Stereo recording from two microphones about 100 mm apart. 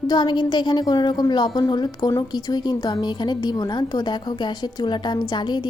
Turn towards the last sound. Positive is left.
turn(degrees=50)  # may be behind; listen again after turning